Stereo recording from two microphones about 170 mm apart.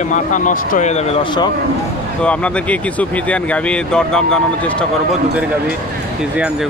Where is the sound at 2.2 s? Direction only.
5° left (ahead or behind).